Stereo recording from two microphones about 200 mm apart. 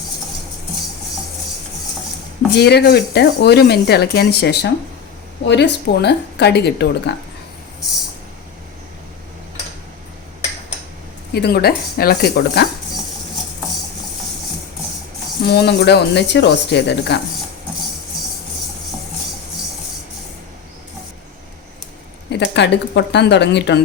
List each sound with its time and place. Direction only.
2.6 s speech: 55° left (ahead or behind)
11.3 s speech: 50° left (ahead or behind)
15.4 s speech: 55° left (ahead or behind)
22.3 s speech: 60° left (ahead or behind)